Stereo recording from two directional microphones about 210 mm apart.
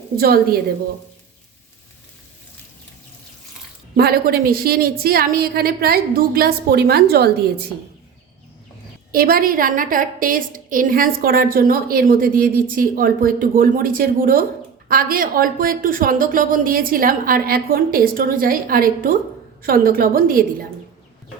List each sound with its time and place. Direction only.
0.2 s a woman's voice: 45° right (ahead or behind)
3.9 s a woman's voice: 45° right (ahead or behind)
9.1 s a woman's voice: 45° right (ahead or behind)